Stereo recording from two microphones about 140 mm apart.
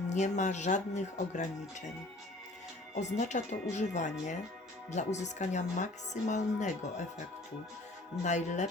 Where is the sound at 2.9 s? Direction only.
55° left (ahead or behind).